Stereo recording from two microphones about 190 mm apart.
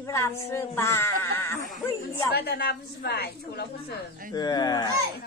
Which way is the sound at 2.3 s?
55° left (ahead or behind).